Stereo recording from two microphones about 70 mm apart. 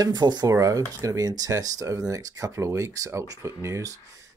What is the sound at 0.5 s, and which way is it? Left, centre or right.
Speech, right.